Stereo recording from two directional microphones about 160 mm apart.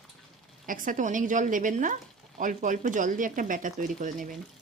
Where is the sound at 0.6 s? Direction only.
55° right (ahead or behind).